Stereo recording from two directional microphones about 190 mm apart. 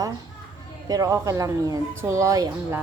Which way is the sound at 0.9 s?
20° right (ahead or behind).